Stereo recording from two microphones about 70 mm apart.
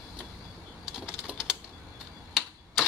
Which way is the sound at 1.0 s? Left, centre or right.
Centre.